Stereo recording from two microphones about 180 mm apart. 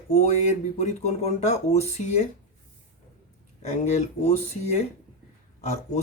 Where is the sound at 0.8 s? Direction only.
40° left (ahead or behind).